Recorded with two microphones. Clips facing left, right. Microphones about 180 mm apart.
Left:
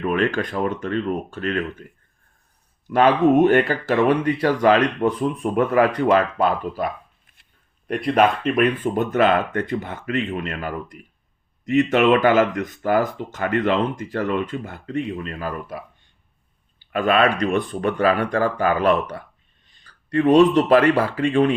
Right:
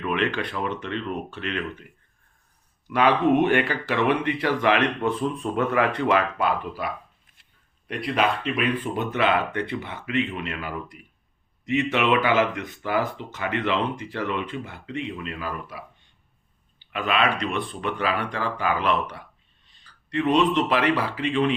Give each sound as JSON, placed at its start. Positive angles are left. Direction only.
{"t": 0.0, "sound": "speech", "side_deg": 45}
{"t": 2.8, "sound": "speech", "side_deg": 45}
{"t": 6.1, "sound": "speech", "side_deg": 40}
{"t": 16.9, "sound": "speech", "side_deg": 45}